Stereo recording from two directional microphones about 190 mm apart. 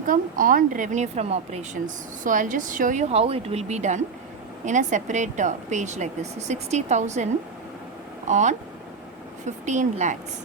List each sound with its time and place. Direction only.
0.1 s a woman's voice: 45° right (ahead or behind)
8.3 s a woman's voice: 40° right (ahead or behind)